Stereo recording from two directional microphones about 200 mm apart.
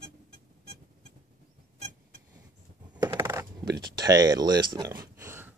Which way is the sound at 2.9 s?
15° right (ahead or behind).